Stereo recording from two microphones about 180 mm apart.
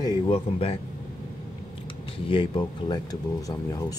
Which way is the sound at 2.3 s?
25° left (ahead or behind).